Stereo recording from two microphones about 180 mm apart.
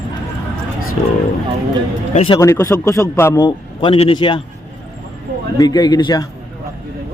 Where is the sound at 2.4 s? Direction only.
15° left (ahead or behind).